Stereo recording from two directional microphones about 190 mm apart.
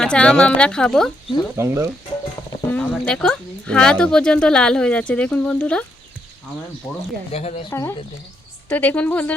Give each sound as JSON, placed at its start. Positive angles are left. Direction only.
{"t": 0.0, "sound": "a woman's voice", "side_deg": 5}
{"t": 1.5, "sound": "speech", "side_deg": -15}
{"t": 2.5, "sound": "speech", "side_deg": 5}
{"t": 7.3, "sound": "speech", "side_deg": 35}
{"t": 7.7, "sound": "a woman's voice", "side_deg": 15}